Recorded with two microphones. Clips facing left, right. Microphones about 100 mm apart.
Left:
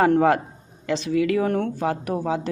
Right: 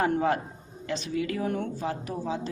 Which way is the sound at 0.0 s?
75° left (ahead or behind).